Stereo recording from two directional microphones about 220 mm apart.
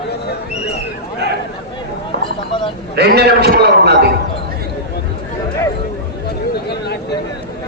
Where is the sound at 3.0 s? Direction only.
45° right (ahead or behind).